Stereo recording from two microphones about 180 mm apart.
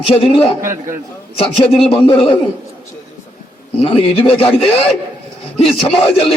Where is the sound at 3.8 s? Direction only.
30° left (ahead or behind).